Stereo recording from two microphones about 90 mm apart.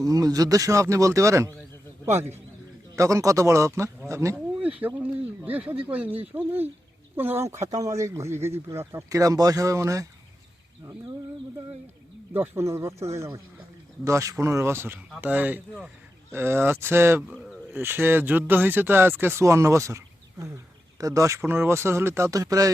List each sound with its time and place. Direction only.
0.0 s speech: 40° right (ahead or behind)
2.0 s speech: 25° right (ahead or behind)
2.9 s speech: 35° right (ahead or behind)
4.6 s speech: 15° right (ahead or behind); by 10.1 s 35° right (ahead or behind)
12.3 s speech: 25° right (ahead or behind)
17.2 s a sound: 5° right (ahead or behind)
17.7 s speech: 25° right (ahead or behind)
21.0 s speech: 40° right (ahead or behind)